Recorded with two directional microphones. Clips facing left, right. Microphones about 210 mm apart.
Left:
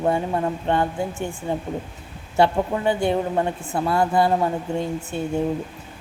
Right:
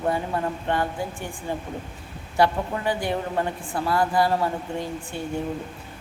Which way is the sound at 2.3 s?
25° left (ahead or behind).